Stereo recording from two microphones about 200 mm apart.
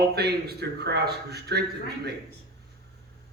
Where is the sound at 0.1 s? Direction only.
55° right (ahead or behind).